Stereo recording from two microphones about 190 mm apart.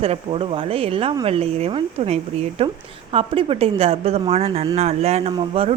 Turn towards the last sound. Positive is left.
turn(degrees=-30)  # may be behind; listen again after turning